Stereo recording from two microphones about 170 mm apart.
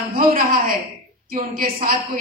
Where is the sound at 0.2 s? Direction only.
60° right (ahead or behind).